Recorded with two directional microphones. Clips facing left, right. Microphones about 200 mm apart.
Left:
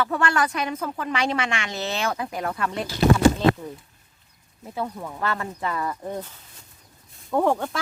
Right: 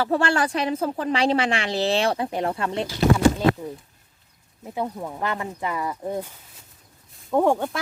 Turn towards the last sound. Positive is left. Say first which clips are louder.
# right 2 dB
turn(degrees=-15)  # may be behind; listen again after turning